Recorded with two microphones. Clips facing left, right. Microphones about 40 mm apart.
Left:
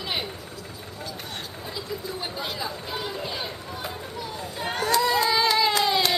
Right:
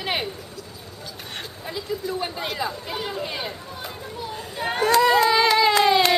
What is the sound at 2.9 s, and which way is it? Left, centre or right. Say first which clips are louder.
Speech: right 2 dB; right.